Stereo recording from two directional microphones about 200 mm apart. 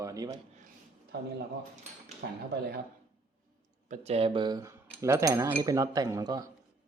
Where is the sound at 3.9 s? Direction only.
30° right (ahead or behind); by 6.4 s 15° right (ahead or behind).